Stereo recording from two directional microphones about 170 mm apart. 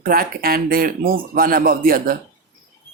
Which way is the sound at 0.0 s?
60° right (ahead or behind).